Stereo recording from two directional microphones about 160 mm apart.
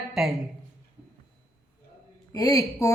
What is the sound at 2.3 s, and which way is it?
Speech, 20° left (ahead or behind).